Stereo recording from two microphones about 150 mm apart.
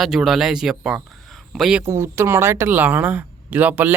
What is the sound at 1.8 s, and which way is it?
Speech, 20° right (ahead or behind).